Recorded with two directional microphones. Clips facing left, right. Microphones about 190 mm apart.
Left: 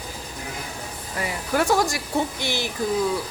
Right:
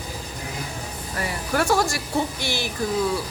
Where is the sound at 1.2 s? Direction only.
15° left (ahead or behind).